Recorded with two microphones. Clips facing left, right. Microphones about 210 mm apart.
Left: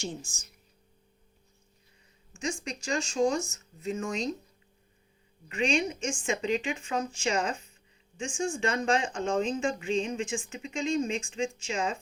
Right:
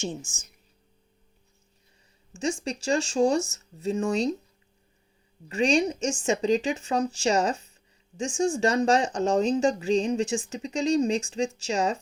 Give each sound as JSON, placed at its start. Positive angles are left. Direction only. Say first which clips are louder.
{"t": 2.6, "sound": "speech", "louder": "right 6 dB", "side_deg": -35}
{"t": 5.5, "sound": "speech", "louder": "right 5 dB", "side_deg": -35}